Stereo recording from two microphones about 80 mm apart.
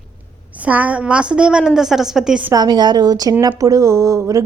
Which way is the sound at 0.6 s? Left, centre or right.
Centre.